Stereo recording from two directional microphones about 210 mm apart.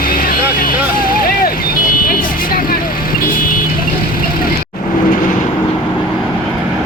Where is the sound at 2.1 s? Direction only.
45° left (ahead or behind).